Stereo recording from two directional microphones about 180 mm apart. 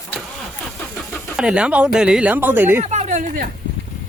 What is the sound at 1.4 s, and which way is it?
Speech, 5° right (ahead or behind).